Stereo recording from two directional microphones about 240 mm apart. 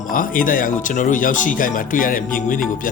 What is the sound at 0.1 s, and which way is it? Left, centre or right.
Speech, left.